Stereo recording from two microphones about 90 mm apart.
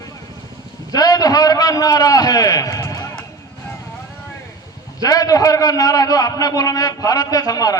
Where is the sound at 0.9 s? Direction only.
45° left (ahead or behind).